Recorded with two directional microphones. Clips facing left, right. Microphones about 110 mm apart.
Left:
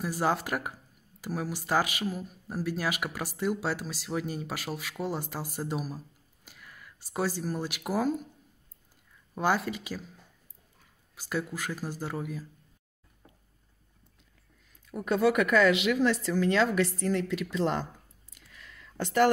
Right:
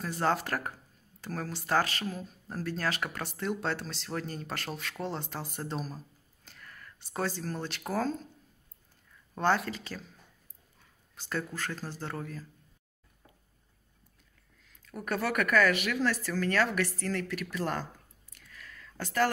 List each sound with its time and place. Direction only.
0.0 s speech: 10° left (ahead or behind)
9.3 s speech: 10° left (ahead or behind)
11.1 s speech: 10° left (ahead or behind)
15.0 s a woman's voice: 15° left (ahead or behind)
18.5 s a sound: 20° left (ahead or behind)